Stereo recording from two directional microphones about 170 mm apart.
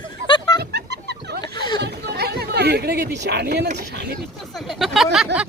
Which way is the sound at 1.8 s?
70° right (ahead or behind).